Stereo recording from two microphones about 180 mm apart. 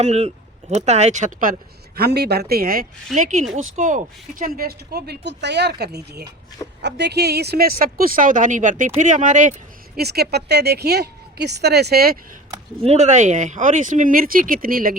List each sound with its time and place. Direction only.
0.0 s speech: 35° right (ahead or behind)
2.0 s speech: 65° right (ahead or behind)
3.2 s speech: 45° right (ahead or behind)
10.0 s speech: 60° right (ahead or behind)
12.8 s speech: 35° right (ahead or behind)